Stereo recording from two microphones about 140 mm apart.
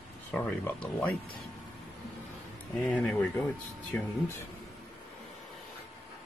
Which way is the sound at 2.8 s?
10° left (ahead or behind).